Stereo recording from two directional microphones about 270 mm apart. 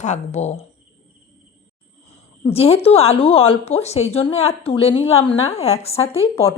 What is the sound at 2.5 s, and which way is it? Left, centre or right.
A woman's voice, left.